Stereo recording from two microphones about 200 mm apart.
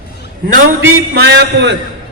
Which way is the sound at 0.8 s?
55° right (ahead or behind).